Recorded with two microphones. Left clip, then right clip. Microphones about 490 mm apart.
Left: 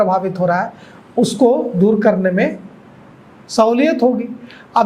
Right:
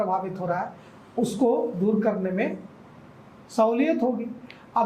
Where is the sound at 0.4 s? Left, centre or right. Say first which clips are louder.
Left 12 dB; left.